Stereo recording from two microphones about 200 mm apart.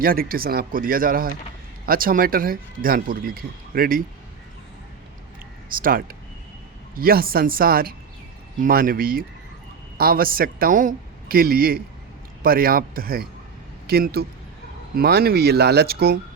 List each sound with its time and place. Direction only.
0.0 s speech: 45° right (ahead or behind)
5.6 s speech: 45° right (ahead or behind)